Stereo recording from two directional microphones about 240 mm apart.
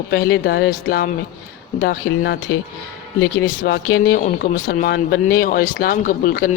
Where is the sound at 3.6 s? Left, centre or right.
Left.